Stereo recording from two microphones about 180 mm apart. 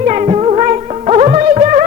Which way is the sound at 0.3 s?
35° right (ahead or behind).